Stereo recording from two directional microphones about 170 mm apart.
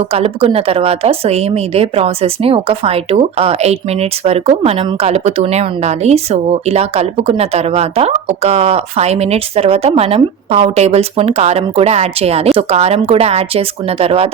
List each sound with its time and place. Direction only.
0.0 s a woman's voice: 35° right (ahead or behind)